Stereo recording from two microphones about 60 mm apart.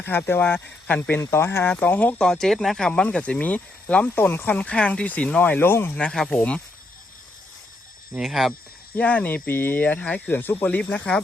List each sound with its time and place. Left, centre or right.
0.1 s speech: left
2.1 s speech: centre
2.9 s speech: centre
4.1 s speech: left
4.5 s speech: centre
6.0 s speech: centre
6.3 s speech: left
8.1 s speech: centre
9.0 s speech: left